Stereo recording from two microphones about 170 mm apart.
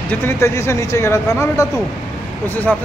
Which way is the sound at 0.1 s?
15° left (ahead or behind).